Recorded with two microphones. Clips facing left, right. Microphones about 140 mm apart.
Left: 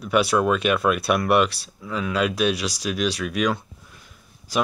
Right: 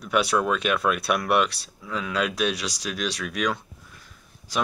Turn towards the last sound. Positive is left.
turn(degrees=5)  # may be behind; listen again after turning